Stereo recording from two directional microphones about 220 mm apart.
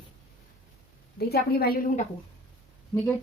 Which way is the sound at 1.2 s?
45° left (ahead or behind).